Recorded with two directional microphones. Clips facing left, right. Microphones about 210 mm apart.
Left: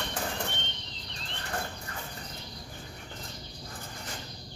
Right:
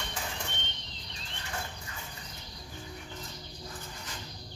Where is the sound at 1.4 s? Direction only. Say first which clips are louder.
Left 4 dB; 55° left (ahead or behind).